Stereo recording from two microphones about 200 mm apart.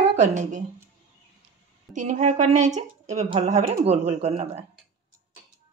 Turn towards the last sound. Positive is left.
turn(degrees=-30)  # may be behind; listen again after turning